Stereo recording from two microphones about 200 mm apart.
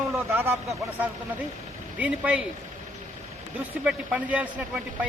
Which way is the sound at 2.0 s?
5° right (ahead or behind).